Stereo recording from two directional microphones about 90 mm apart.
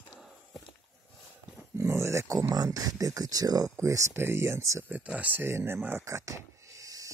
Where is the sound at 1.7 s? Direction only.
30° right (ahead or behind).